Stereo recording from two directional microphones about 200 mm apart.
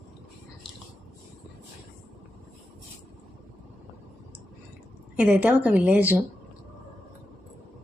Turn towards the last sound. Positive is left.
turn(degrees=-10)  # may be behind; listen again after turning